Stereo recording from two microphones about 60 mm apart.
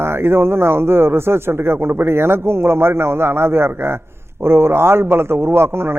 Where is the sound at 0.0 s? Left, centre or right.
Right.